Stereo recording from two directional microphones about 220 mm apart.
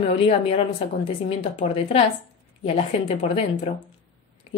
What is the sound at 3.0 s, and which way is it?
Speech, 30° left (ahead or behind).